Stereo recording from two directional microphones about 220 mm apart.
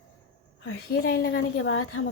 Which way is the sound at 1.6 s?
70° left (ahead or behind).